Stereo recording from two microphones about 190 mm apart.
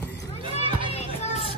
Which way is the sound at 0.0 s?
65° left (ahead or behind).